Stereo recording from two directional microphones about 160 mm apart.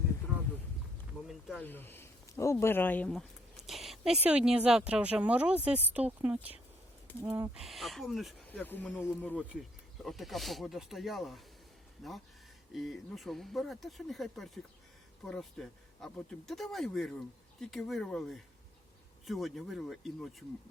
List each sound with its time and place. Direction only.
1.3 s a sound: centre (ahead or behind)
1.6 s speech: 15° left (ahead or behind); by 7.5 s 15° right (ahead or behind)
7.5 s speech: centre (ahead or behind)
8.6 s speech: 10° left (ahead or behind)
12.7 s speech: centre (ahead or behind)